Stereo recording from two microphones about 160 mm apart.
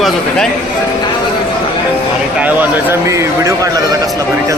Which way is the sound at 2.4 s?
10° right (ahead or behind).